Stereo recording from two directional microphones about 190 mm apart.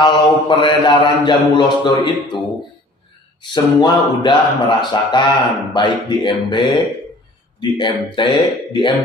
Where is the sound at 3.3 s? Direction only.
25° left (ahead or behind).